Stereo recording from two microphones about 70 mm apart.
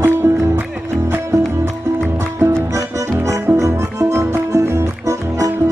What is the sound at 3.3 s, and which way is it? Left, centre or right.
Music, right.